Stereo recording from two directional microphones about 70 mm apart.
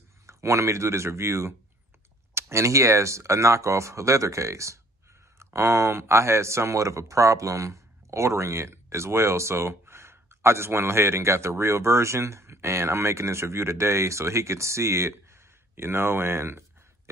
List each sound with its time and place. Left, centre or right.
0.3 s speech: right